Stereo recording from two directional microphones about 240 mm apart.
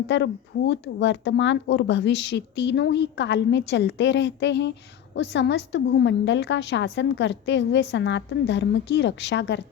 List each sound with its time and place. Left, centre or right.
0.1 s a woman's voice: left